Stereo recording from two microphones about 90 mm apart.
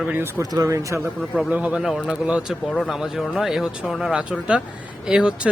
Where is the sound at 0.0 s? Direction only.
20° right (ahead or behind).